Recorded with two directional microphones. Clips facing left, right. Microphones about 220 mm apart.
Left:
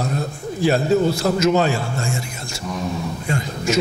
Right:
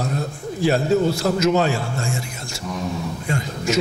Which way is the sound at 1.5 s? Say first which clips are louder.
Left 1 dB; 20° left (ahead or behind).